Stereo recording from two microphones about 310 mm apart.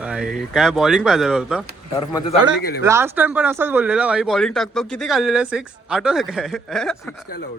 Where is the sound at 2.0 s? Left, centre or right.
Centre.